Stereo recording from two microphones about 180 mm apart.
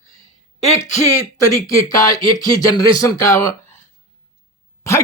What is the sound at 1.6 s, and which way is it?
Speech, 20° left (ahead or behind).